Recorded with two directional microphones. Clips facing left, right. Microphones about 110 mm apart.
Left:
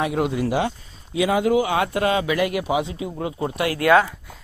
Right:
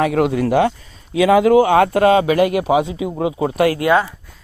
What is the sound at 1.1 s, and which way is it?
Speech, 80° right.